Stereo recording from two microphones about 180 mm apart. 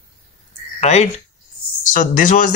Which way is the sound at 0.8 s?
40° left (ahead or behind).